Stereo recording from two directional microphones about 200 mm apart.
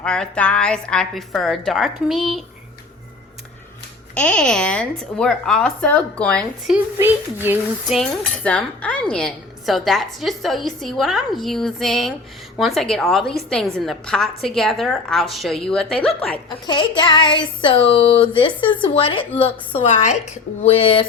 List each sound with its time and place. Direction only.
0.0 s cutlery: 5° left (ahead or behind)
4.1 s cutlery: 5° left (ahead or behind)
6.7 s speech: 10° right (ahead or behind)
7.9 s cutlery: 5° left (ahead or behind)
16.6 s speech: 25° left (ahead or behind)